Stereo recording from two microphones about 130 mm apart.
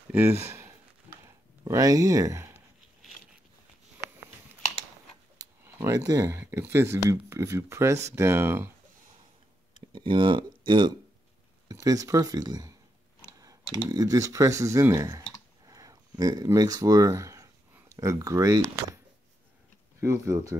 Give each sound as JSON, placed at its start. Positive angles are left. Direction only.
{"t": 0.1, "sound": "speech", "side_deg": -20}
{"t": 1.2, "sound": "a sound", "side_deg": -25}
{"t": 5.7, "sound": "speech", "side_deg": -25}
{"t": 9.9, "sound": "speech", "side_deg": -40}
{"t": 11.7, "sound": "speech", "side_deg": -25}
{"t": 13.8, "sound": "speech", "side_deg": -30}
{"t": 20.0, "sound": "speech", "side_deg": -20}